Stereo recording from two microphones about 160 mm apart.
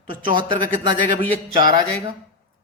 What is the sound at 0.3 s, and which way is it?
Speech, 30° right (ahead or behind).